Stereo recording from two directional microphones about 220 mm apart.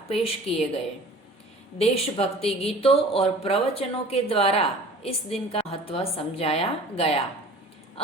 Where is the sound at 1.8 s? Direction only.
25° left (ahead or behind).